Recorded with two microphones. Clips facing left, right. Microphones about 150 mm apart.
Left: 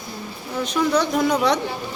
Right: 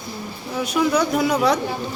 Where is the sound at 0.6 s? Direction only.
10° right (ahead or behind).